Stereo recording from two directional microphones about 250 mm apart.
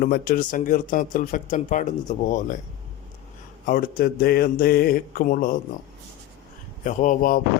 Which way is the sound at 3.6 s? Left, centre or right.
Left.